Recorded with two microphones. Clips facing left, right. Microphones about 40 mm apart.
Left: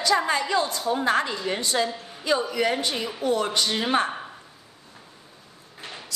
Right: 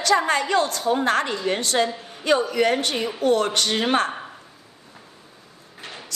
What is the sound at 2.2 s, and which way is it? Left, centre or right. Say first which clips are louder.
A woman's voice: right 4 dB; right.